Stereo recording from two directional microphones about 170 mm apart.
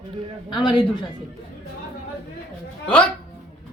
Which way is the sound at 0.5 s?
25° left (ahead or behind).